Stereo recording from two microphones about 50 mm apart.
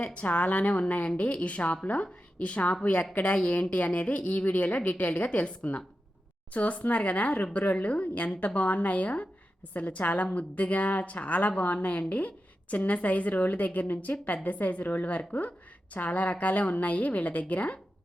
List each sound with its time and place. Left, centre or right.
0.0 s a woman's voice: left